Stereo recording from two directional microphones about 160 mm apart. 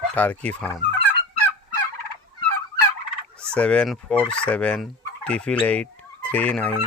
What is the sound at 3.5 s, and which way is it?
Fowl, 5° left (ahead or behind).